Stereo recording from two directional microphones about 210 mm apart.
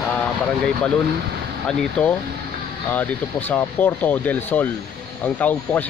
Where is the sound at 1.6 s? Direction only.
5° left (ahead or behind).